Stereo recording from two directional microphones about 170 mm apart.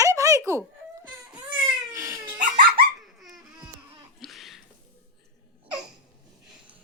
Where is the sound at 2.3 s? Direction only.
50° right (ahead or behind).